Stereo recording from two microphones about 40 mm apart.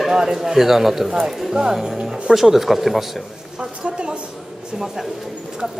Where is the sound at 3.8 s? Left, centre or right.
Right.